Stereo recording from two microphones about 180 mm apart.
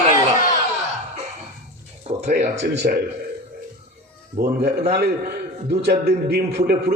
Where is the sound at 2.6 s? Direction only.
60° right (ahead or behind).